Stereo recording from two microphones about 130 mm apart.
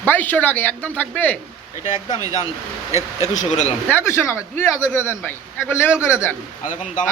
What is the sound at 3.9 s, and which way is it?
A man's voice, 20° left (ahead or behind).